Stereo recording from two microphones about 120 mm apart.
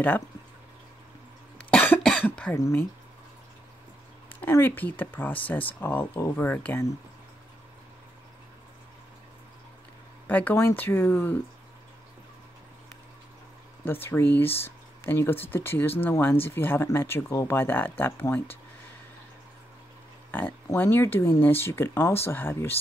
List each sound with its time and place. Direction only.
1.7 s cough: 10° left (ahead or behind)
2.5 s speech: 25° left (ahead or behind)
4.3 s speech: 20° left (ahead or behind)
10.2 s speech: 15° left (ahead or behind)
13.8 s speech: 20° left (ahead or behind)
20.2 s a sound: 15° left (ahead or behind)
20.7 s speech: 20° left (ahead or behind)